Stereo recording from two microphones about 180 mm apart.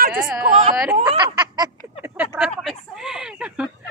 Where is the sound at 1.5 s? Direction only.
20° right (ahead or behind).